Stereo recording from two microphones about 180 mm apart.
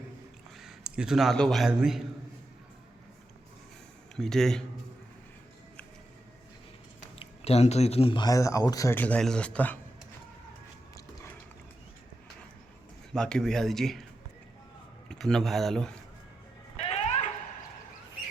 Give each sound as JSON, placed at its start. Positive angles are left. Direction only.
{"t": 0.6, "sound": "speech", "side_deg": -5}
{"t": 4.2, "sound": "speech", "side_deg": 0}
{"t": 7.2, "sound": "speech", "side_deg": 35}
{"t": 13.1, "sound": "speech", "side_deg": 5}
{"t": 15.1, "sound": "speech", "side_deg": 5}
{"t": 16.7, "sound": "a sound", "side_deg": 35}